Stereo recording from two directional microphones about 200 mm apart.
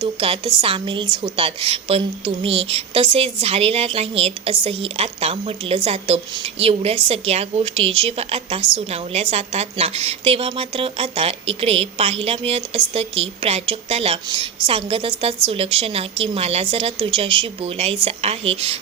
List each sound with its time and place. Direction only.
0.0 s a woman's voice: 25° right (ahead or behind)